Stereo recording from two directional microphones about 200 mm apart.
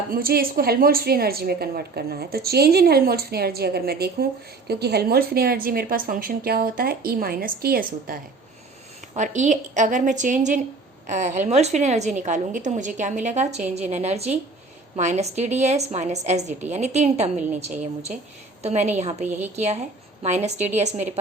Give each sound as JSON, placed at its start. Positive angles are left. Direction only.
{"t": 0.1, "sound": "a woman's voice", "side_deg": -45}